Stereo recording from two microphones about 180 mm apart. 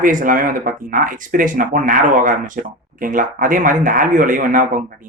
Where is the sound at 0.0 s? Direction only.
50° right (ahead or behind).